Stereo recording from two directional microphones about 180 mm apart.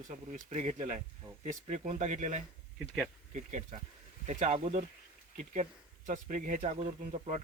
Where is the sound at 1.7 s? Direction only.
40° right (ahead or behind).